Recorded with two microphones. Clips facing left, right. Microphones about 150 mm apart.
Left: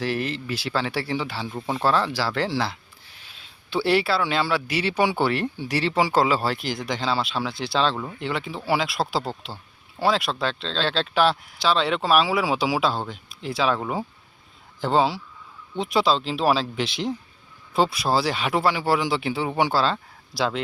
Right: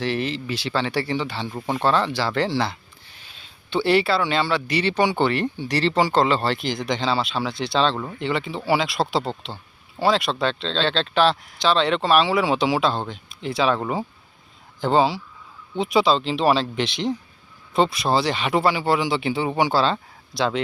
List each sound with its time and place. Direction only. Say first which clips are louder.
0.0 s speech: right 2 dB; centre (ahead or behind)